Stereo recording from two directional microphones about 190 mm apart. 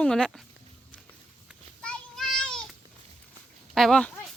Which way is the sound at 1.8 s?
5° left (ahead or behind).